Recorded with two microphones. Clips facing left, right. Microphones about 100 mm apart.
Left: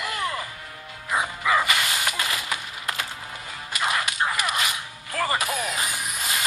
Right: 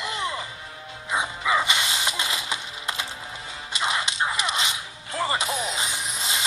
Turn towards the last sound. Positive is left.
turn(degrees=-25)  # may be behind; listen again after turning